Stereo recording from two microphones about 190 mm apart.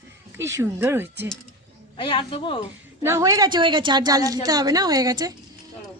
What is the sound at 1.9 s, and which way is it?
Speech, 25° left (ahead or behind).